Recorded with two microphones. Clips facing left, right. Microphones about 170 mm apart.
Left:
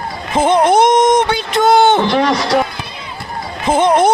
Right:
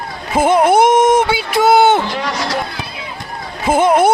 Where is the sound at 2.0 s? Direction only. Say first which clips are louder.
Left 8 dB; 70° left (ahead or behind).